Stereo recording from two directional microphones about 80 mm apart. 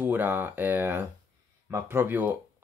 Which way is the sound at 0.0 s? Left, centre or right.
Right.